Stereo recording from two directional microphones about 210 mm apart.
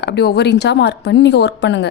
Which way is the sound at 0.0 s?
50° left (ahead or behind).